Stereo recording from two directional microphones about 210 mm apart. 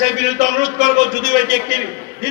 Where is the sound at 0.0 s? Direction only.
35° right (ahead or behind).